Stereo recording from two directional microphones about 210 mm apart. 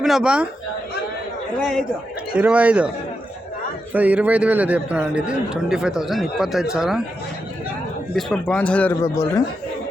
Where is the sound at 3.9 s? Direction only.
5° right (ahead or behind).